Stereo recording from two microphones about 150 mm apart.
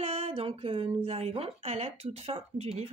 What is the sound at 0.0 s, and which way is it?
A woman's voice, 40° right (ahead or behind).